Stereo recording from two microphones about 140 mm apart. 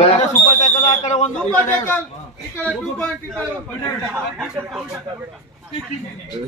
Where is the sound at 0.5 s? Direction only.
55° left (ahead or behind).